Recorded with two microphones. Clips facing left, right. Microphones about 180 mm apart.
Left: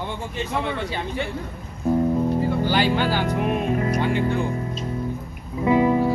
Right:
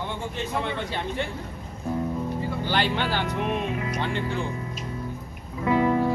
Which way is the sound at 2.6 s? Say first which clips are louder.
Left 2 dB; 5° left (ahead or behind).